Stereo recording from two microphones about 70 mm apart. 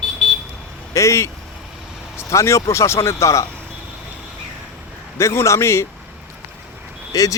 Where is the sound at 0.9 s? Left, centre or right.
Left.